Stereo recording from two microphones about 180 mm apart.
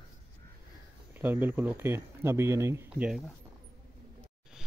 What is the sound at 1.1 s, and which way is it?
Speech, 10° right (ahead or behind).